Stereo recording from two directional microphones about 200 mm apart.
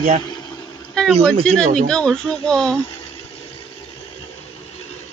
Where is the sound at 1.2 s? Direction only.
5° left (ahead or behind).